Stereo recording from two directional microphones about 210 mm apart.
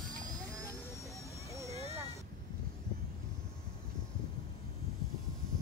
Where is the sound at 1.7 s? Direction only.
30° right (ahead or behind).